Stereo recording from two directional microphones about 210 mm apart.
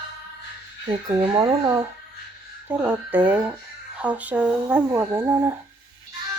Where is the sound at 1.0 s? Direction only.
15° right (ahead or behind).